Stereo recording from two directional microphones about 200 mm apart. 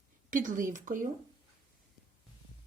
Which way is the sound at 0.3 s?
40° right (ahead or behind).